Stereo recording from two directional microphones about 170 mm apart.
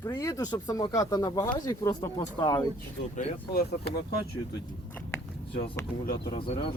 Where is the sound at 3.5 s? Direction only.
70° left (ahead or behind).